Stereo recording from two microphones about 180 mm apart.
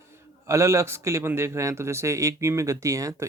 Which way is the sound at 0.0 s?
15° right (ahead or behind).